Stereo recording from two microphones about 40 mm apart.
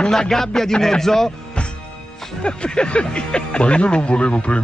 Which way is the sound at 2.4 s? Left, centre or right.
Left.